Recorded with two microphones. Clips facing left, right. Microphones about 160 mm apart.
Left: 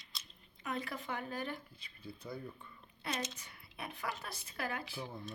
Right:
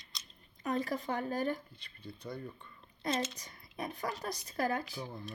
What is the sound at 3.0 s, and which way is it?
Speech, 40° right (ahead or behind).